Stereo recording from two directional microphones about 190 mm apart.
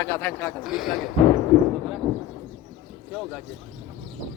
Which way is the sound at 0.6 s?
Centre (ahead or behind).